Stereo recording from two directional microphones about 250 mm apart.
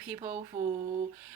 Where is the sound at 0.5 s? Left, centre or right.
Right.